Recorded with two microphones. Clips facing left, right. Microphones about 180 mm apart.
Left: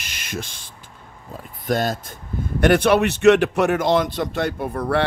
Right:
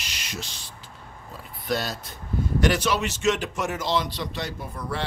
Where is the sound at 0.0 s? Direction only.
50° left (ahead or behind).